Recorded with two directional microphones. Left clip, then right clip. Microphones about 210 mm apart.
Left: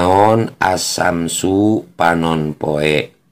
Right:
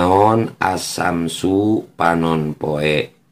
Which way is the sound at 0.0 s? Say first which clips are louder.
Left 2 dB; 25° left (ahead or behind).